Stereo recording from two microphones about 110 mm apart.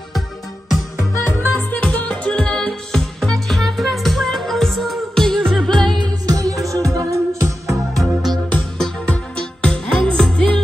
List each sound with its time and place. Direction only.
1.1 s music: 25° left (ahead or behind)
1.5 s music: 10° left (ahead or behind)
5.9 s music: 45° right (ahead or behind)
6.3 s music: 30° right (ahead or behind)
8.0 s music: centre (ahead or behind)